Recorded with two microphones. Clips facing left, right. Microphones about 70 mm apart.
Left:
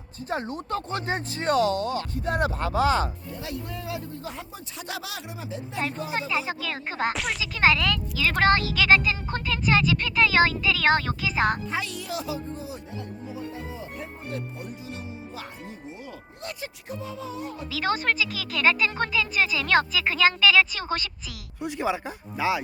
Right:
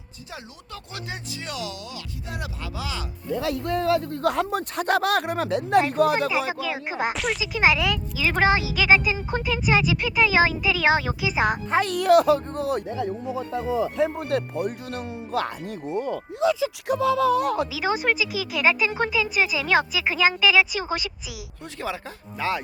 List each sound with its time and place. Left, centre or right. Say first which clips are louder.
0.3 s speech: left 11 dB; left
3.3 s speech: right 15 dB; right
6.5 s speech: right 3 dB; centre
11.7 s speech: right 13 dB; right
15.9 s speech: right 18 dB; right
16.9 s speech: right 16 dB; right
17.7 s speech: right 2 dB; centre
21.6 s speech: left 5 dB; centre